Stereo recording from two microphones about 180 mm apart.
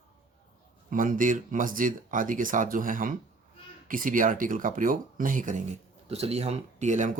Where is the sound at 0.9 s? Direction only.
50° right (ahead or behind).